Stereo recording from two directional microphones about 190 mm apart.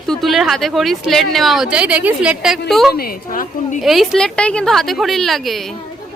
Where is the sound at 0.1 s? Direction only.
Centre (ahead or behind).